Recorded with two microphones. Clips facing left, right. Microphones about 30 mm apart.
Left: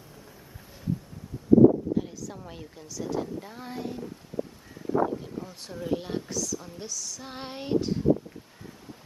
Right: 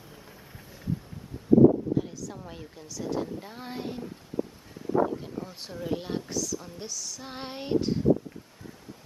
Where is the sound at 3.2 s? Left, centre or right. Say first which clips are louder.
Left 1 dB; centre.